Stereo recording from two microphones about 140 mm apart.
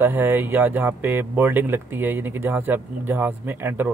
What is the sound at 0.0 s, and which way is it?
Speech, 15° right (ahead or behind).